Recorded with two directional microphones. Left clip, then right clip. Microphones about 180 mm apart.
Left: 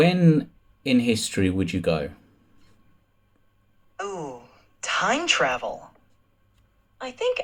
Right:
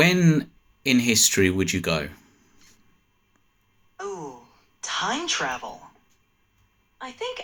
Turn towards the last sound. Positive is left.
turn(degrees=20)  # may be behind; listen again after turning